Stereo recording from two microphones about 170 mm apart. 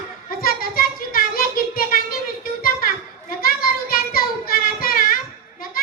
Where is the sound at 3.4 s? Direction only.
60° left (ahead or behind).